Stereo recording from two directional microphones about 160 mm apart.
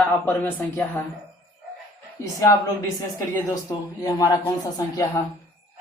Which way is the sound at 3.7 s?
20° left (ahead or behind).